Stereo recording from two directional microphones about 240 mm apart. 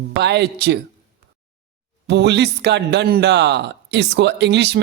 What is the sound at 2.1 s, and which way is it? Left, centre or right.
Speech, right.